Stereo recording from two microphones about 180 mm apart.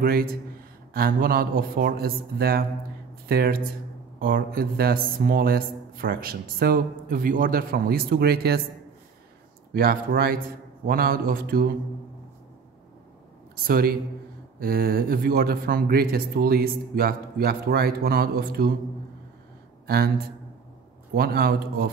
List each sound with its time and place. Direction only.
0.0 s a man's voice: 55° right (ahead or behind)
9.8 s speech: 55° right (ahead or behind)
13.7 s speech: 55° right (ahead or behind)
21.1 s speech: 60° right (ahead or behind)